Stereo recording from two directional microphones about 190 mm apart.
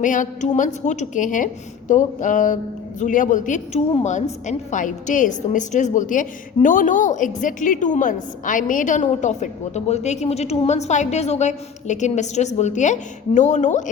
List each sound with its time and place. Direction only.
0.0 s a woman's voice: 40° left (ahead or behind)